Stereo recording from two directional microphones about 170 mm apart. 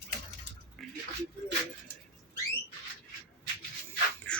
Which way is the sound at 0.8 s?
Centre (ahead or behind).